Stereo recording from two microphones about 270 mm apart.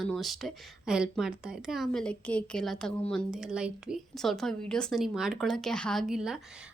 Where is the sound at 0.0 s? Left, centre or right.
Centre.